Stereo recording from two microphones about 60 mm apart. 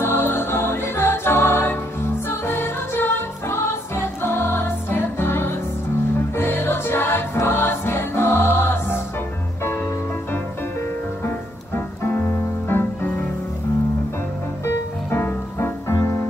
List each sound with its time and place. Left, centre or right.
0.0 s music: left
11.2 s music: left
15.0 s music: left